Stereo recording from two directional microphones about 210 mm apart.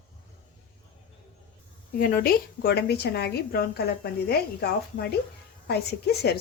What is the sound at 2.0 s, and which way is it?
A woman's voice, 45° left (ahead or behind).